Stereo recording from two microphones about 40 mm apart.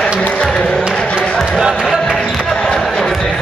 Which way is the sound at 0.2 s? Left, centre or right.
Left.